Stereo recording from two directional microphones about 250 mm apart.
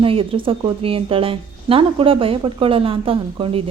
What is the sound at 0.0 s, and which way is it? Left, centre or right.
A woman's voice, right.